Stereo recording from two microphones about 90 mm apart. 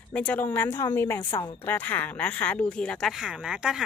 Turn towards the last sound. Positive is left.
turn(degrees=-10)  # may be behind; listen again after turning